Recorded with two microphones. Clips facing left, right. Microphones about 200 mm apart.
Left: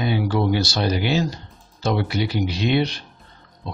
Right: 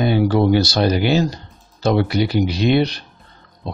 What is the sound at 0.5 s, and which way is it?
Speech, 40° right (ahead or behind).